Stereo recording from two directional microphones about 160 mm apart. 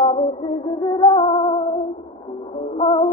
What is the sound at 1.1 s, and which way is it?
Music, 35° left (ahead or behind).